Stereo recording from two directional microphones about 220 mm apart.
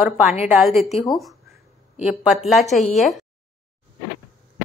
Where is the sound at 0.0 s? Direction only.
5° right (ahead or behind).